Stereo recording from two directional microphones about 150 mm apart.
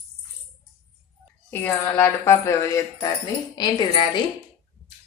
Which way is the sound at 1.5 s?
15° left (ahead or behind).